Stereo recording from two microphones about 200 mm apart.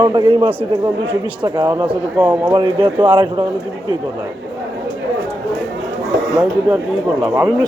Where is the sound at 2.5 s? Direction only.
25° right (ahead or behind).